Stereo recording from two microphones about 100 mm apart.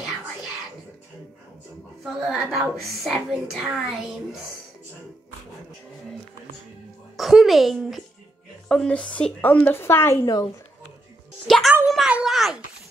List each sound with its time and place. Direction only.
2.1 s a woman's voice: 5° right (ahead or behind)
7.2 s a woman's voice: centre (ahead or behind)
8.6 s a woman's voice: 10° left (ahead or behind); by 10.1 s 25° left (ahead or behind)
10.2 s a woman's voice: 40° left (ahead or behind)
11.4 s a woman's voice: centre (ahead or behind)